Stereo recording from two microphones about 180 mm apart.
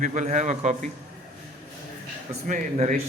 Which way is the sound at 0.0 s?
40° right (ahead or behind).